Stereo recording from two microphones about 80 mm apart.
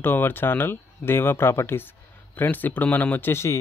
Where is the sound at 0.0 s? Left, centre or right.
Left.